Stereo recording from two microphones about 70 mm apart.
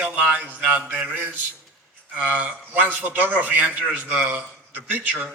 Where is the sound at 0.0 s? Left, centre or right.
Right.